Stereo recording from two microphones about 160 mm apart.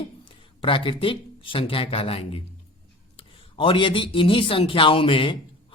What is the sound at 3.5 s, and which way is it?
A man's voice, 30° left (ahead or behind).